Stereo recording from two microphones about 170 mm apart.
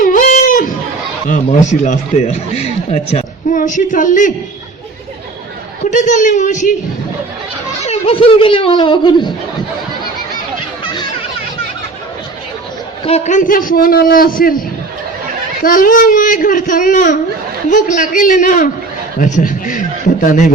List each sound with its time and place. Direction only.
0.0 s a sound: 55° left (ahead or behind)
1.3 s speech: 45° left (ahead or behind)
5.8 s speech: 45° left (ahead or behind)
7.9 s speech: 35° left (ahead or behind)
13.1 s a man's voice: 40° left (ahead or behind); by 14.6 s 55° left (ahead or behind)
15.6 s speech: 55° left (ahead or behind)